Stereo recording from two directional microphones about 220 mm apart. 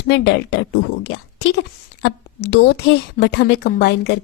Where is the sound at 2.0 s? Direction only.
50° left (ahead or behind).